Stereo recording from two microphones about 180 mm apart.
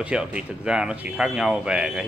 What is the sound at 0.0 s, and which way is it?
A man's voice, 5° right (ahead or behind).